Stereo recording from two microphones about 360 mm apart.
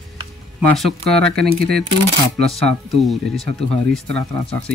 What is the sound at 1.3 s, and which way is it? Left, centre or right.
Speech, right.